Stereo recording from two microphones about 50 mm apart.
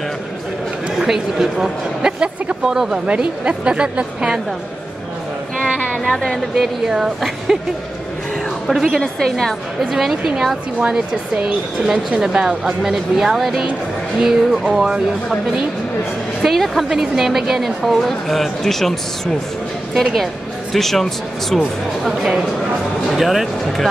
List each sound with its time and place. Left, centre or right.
0.9 s a woman's voice: centre
6.0 s a woman's voice: centre
6.5 s speech: centre
8.6 s a woman's voice: centre
9.0 s a woman's voice: centre
9.8 s a woman's voice: centre
10.8 s a woman's voice: right; by 14.7 s centre
16.4 s a woman's voice: centre
20.7 s a woman's voice: centre
23.1 s a woman's voice: centre